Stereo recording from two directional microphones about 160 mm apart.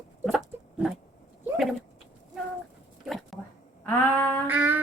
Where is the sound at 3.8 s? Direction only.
10° left (ahead or behind).